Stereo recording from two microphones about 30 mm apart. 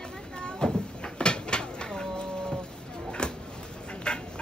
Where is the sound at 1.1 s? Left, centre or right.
Left.